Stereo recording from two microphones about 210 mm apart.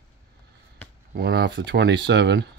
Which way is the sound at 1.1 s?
50° right (ahead or behind).